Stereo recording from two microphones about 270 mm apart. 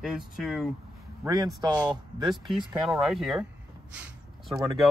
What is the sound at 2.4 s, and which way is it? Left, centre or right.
Speech, centre.